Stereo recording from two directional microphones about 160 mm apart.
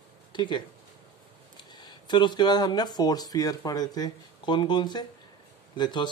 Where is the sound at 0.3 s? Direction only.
30° left (ahead or behind).